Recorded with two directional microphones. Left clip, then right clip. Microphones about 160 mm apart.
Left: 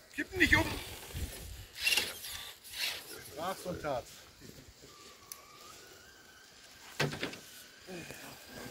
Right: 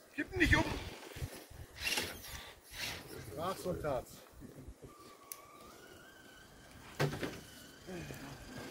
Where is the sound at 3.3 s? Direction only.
80° right.